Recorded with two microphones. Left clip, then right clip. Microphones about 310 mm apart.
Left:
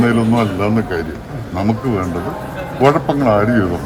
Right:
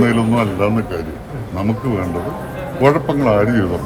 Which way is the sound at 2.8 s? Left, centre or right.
Centre.